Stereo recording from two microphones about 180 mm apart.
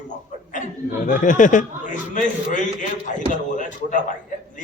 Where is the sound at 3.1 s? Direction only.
45° left (ahead or behind).